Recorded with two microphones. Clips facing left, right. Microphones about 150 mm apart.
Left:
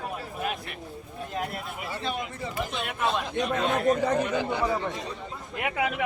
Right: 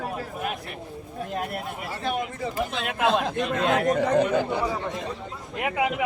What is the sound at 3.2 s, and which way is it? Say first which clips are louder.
Speech: right 2 dB; 80° right.